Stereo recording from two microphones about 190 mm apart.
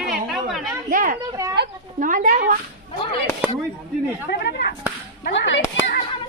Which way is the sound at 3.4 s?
10° right (ahead or behind).